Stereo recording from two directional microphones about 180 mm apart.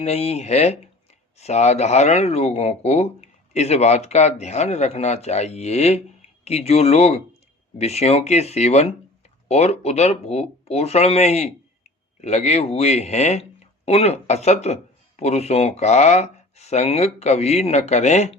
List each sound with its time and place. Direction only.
0.0 s speech: 35° left (ahead or behind)